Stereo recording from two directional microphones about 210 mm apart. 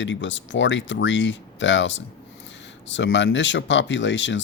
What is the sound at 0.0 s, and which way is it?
Speech, 60° left (ahead or behind).